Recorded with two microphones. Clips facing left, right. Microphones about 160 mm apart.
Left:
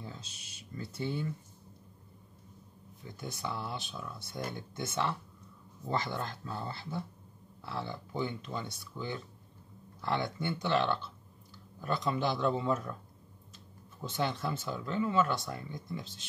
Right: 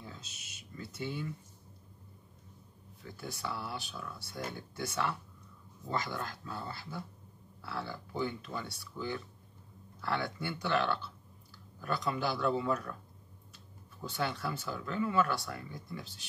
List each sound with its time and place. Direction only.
0.0 s speech: 30° left (ahead or behind)
3.0 s speech: 20° left (ahead or behind)
14.0 s speech: 20° left (ahead or behind)